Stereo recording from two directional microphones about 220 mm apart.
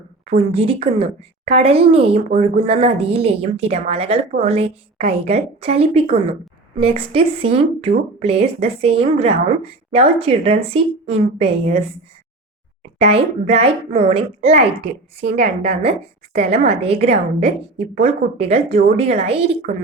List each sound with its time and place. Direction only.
0.3 s speech: 25° right (ahead or behind)
13.0 s speech: 30° right (ahead or behind)